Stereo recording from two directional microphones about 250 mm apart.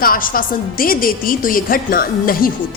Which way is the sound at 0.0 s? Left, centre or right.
Left.